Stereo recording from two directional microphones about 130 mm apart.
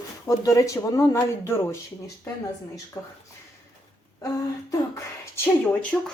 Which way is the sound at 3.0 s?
20° left (ahead or behind).